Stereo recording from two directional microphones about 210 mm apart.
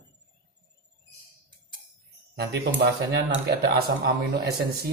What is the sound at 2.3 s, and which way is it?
Speech, 50° right (ahead or behind).